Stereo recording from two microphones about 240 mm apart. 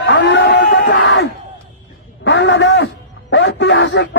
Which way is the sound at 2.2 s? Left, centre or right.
Left.